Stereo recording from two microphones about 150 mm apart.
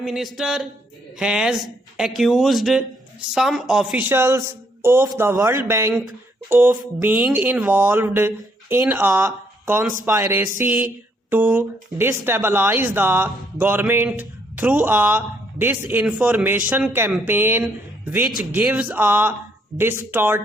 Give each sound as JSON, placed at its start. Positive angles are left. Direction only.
{"t": 0.0, "sound": "a man's voice", "side_deg": 0}